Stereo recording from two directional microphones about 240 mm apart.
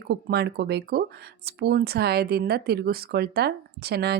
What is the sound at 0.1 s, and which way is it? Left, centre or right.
Speech, right.